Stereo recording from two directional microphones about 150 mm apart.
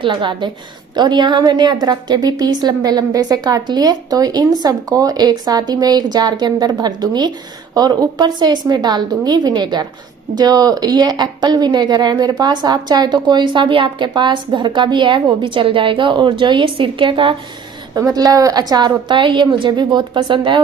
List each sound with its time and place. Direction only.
0.0 s a woman's voice: 30° right (ahead or behind)